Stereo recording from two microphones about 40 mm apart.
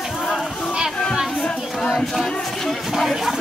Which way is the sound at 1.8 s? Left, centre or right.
Centre.